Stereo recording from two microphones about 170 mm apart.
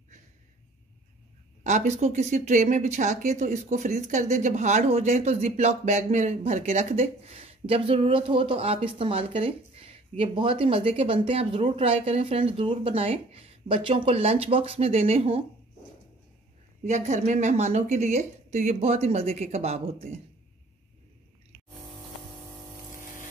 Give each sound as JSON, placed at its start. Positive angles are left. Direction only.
{"t": 1.6, "sound": "speech", "side_deg": -45}
{"t": 16.8, "sound": "speech", "side_deg": -45}